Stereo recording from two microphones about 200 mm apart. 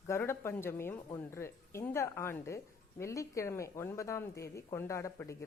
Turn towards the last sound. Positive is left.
turn(degrees=15)  # may be behind; listen again after turning